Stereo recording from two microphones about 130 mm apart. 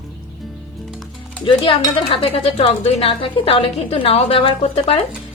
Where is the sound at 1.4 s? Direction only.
45° left (ahead or behind).